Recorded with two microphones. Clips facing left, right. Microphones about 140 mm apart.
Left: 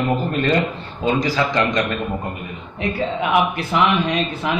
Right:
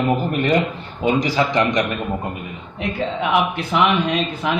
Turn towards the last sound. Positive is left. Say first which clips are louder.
# even
turn(degrees=0)  # may be behind; listen again after turning